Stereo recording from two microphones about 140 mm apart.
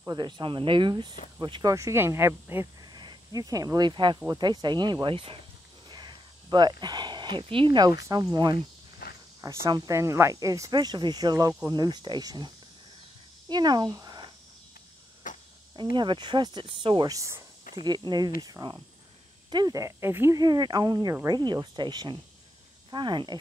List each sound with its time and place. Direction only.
0.0 s speech: 30° right (ahead or behind); by 2.7 s 15° right (ahead or behind)
2.8 s speech: 30° right (ahead or behind)
9.0 s cricket: 90° left
9.4 s speech: 25° right (ahead or behind)
13.5 s speech: 30° right (ahead or behind)
15.2 s a sound: 70° left (ahead or behind)
15.7 s speech: 35° right (ahead or behind); by 20.3 s 20° right (ahead or behind)
20.3 s speech: 30° right (ahead or behind)